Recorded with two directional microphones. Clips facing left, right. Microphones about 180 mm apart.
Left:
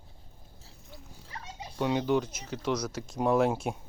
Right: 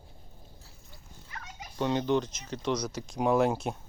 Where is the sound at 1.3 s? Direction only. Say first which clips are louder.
Left 2 dB; 30° left (ahead or behind).